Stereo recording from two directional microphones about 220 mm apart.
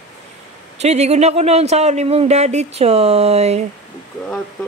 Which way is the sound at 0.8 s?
30° right (ahead or behind).